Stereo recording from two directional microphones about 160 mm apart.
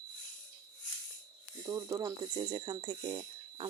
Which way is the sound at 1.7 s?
20° right (ahead or behind).